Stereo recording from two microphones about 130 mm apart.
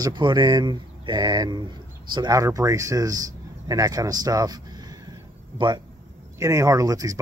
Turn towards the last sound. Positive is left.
turn(degrees=-30)  # may be behind; listen again after turning